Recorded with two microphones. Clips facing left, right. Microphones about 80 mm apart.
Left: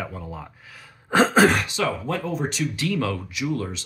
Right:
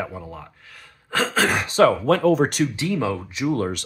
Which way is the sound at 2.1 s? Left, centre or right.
Right.